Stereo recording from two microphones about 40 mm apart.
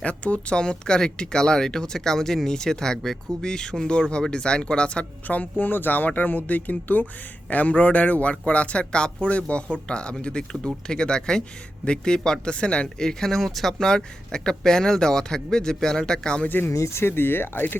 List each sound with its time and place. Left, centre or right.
0.0 s speech: left
5.3 s speech: left
13.0 s speech: centre
16.6 s speech: left